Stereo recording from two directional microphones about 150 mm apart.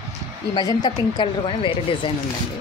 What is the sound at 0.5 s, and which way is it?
A woman's voice, 25° left (ahead or behind).